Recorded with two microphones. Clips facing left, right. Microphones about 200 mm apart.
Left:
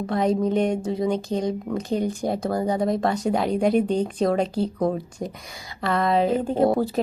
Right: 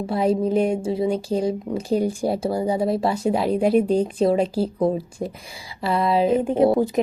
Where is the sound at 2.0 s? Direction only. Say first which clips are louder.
Right 3 dB; 10° right (ahead or behind).